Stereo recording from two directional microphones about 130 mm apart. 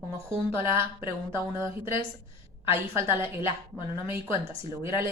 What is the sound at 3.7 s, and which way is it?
Speech, 15° left (ahead or behind).